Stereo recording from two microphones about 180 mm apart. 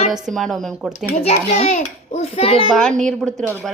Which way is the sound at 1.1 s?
35° left (ahead or behind).